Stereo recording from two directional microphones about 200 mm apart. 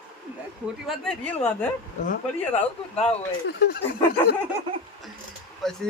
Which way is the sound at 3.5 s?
50° left (ahead or behind).